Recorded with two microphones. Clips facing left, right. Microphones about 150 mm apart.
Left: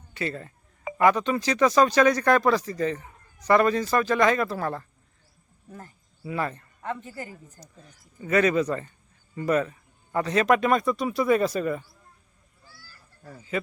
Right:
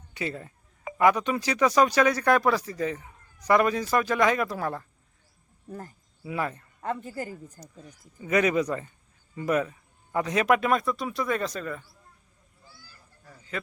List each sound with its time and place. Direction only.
0.1 s speech: 15° right (ahead or behind)
6.2 s speech: 10° right (ahead or behind)
7.0 s speech: 40° right (ahead or behind)
7.4 s speech: 10° right (ahead or behind); by 11.9 s 10° left (ahead or behind)
12.6 s honk: 15° right (ahead or behind)
13.5 s speech: 5° left (ahead or behind)